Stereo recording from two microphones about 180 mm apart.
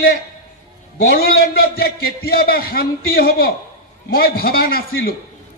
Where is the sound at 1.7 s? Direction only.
60° left (ahead or behind).